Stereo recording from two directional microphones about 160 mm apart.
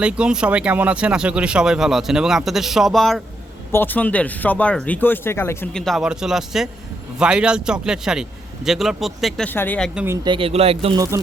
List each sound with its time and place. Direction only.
0.0 s speech: 5° right (ahead or behind)
3.7 s speech: 10° left (ahead or behind)
5.7 s speech: centre (ahead or behind)
9.5 s speech: 10° left (ahead or behind)
9.9 s speech: 10° right (ahead or behind)
10.2 s speech: 35° right (ahead or behind)
10.9 s speech: 20° right (ahead or behind)